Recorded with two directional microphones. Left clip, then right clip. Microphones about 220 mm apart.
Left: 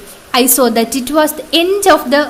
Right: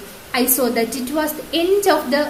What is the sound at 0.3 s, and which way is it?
A woman's voice, 35° left (ahead or behind).